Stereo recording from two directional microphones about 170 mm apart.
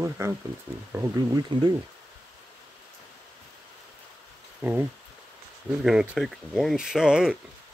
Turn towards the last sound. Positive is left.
turn(degrees=-5)  # may be behind; listen again after turning